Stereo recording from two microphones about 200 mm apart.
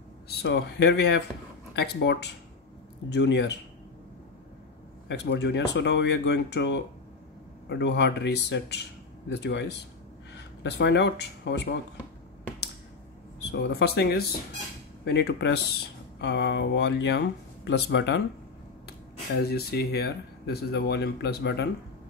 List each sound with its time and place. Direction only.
0.4 s speech: 60° left (ahead or behind)
5.0 s speech: 65° left (ahead or behind)
13.4 s speech: 60° left (ahead or behind)